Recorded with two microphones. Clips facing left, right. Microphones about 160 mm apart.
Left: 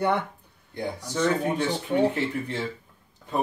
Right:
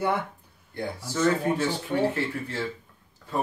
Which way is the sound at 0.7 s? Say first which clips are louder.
Left 1 dB; 20° left (ahead or behind).